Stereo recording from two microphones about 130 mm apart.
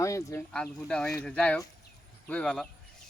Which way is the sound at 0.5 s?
5° left (ahead or behind).